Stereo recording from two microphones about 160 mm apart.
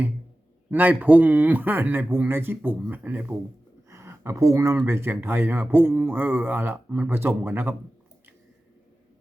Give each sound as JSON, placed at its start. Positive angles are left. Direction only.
{"t": 0.7, "sound": "a man's voice", "side_deg": -10}
{"t": 3.8, "sound": "a sound", "side_deg": -15}
{"t": 4.9, "sound": "a man's voice", "side_deg": -15}